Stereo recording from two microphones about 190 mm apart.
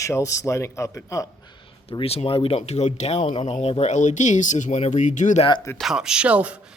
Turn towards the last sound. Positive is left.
turn(degrees=-5)  # may be behind; listen again after turning